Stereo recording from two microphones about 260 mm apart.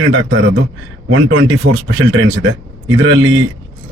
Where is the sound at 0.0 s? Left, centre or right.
Right.